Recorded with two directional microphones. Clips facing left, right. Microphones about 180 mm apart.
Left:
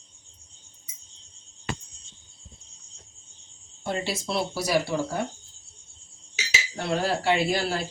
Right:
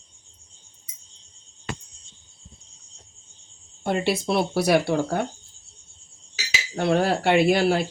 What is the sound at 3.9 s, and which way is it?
Speech, 60° right (ahead or behind).